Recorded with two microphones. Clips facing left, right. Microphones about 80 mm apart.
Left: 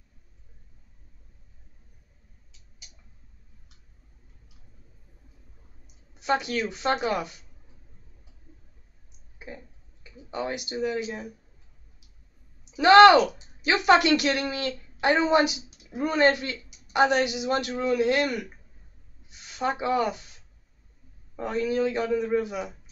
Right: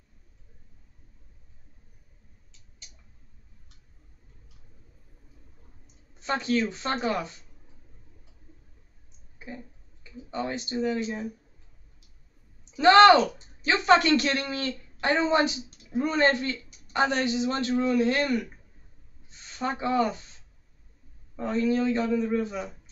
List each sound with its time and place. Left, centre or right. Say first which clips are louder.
6.1 s a man's voice: even; centre
8.5 s a sound: left 1 dB; centre
10.3 s a man's voice: even; centre
12.6 s a man's voice: left 2 dB; centre
21.4 s a man's voice: even; centre